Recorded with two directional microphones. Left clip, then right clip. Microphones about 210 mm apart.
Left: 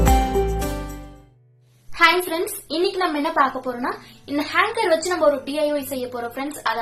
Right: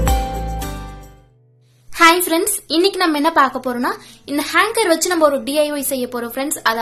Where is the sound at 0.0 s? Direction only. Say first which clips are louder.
Left 2 dB; centre (ahead or behind).